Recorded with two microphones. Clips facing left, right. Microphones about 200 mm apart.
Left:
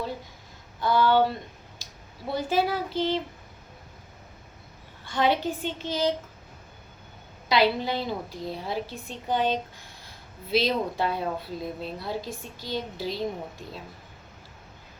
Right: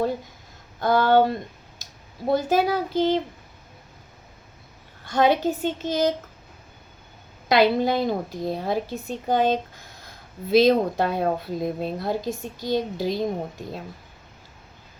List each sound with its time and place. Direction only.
0.8 s speech: 45° right (ahead or behind)
5.0 s speech: 45° right (ahead or behind)
7.4 s speech: 45° right (ahead or behind)